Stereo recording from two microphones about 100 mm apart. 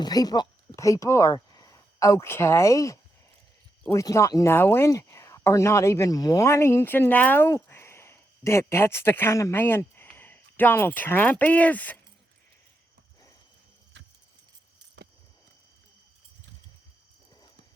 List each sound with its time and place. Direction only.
0.0 s speech: 40° left (ahead or behind)
4.0 s speech: 35° left (ahead or behind)
4.5 s speech: 20° left (ahead or behind)